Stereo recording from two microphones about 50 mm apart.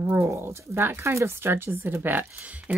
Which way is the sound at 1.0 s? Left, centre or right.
Right.